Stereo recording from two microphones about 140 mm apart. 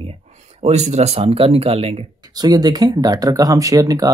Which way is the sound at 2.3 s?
30° right (ahead or behind).